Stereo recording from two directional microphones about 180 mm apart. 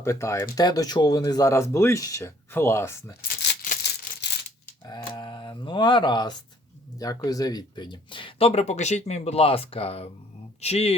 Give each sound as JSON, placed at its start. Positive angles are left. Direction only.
{"t": 0.0, "sound": "speech", "side_deg": 15}
{"t": 3.2, "sound": "maraca", "side_deg": 50}
{"t": 4.9, "sound": "speech", "side_deg": 25}